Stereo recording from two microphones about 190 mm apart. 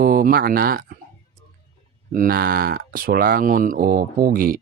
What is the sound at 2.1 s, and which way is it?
Speech, 50° right (ahead or behind).